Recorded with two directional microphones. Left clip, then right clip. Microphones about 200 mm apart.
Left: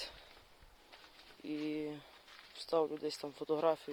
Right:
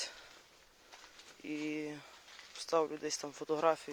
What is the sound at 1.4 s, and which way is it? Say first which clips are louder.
Speech: even; 15° left (ahead or behind).